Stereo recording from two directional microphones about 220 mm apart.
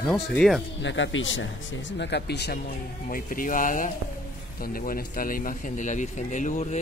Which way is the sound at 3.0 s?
40° left (ahead or behind).